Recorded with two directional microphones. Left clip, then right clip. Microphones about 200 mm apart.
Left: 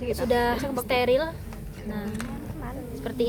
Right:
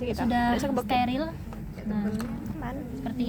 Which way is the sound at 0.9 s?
65° left (ahead or behind).